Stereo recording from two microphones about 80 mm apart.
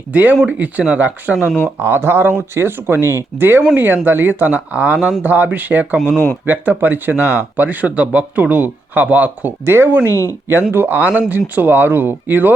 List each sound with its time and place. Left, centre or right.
0.1 s speech: right
1.8 s speech: right
10.1 s speech: left
10.5 s speech: right